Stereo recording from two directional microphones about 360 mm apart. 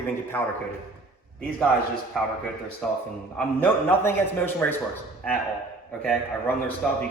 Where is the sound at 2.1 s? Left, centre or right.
Centre.